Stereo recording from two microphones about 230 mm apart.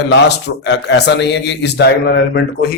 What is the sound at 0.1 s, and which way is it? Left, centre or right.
A man's voice, left.